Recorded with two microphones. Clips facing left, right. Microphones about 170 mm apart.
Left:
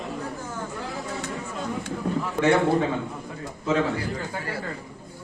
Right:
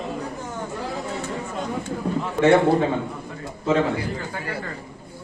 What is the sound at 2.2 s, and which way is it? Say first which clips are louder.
Speech: right 4 dB; 30° right (ahead or behind).